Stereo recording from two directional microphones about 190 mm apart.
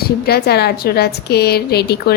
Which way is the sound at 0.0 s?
55° left (ahead or behind).